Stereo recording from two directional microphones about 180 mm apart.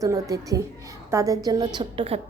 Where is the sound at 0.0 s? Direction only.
20° right (ahead or behind).